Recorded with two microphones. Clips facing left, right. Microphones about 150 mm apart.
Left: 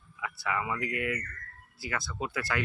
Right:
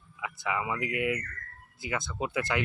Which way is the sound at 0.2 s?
15° right (ahead or behind).